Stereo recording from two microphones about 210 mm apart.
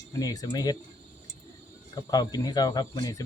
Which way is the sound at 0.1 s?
15° left (ahead or behind).